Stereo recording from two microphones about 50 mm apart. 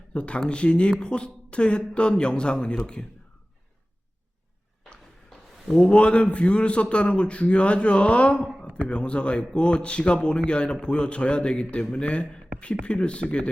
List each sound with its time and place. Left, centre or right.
0.1 s a man's voice: left
5.6 s a man's voice: centre
5.9 s a man's voice: left